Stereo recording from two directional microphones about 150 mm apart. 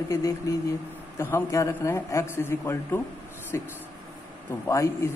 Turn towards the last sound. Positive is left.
turn(degrees=20)  # may be behind; listen again after turning